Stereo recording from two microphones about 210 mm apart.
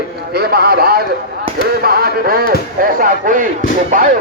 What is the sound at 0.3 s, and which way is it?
A man's voice, 50° right (ahead or behind).